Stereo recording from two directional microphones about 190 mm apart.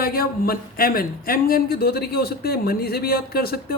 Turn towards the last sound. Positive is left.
turn(degrees=55)  # may be behind; listen again after turning